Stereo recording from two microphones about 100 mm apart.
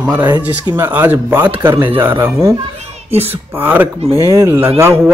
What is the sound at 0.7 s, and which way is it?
Speech, 20° right (ahead or behind).